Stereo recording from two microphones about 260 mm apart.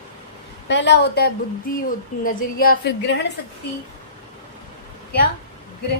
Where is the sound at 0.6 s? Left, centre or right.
Left.